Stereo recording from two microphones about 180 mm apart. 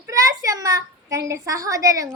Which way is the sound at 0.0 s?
20° right (ahead or behind).